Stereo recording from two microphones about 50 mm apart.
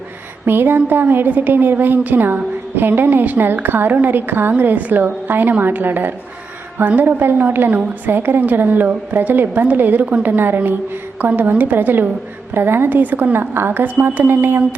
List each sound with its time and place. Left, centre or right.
0.4 s a woman's voice: right
7.7 s a woman's voice: right
8.1 s a woman's voice: right